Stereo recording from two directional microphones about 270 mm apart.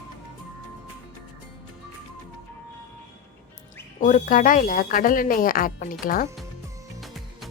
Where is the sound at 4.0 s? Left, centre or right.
Left.